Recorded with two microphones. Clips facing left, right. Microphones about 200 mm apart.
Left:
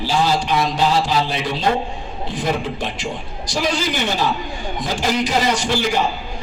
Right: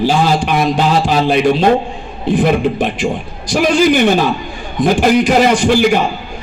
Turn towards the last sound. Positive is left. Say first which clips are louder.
# right 8 dB
turn(degrees=-55)  # may be behind; listen again after turning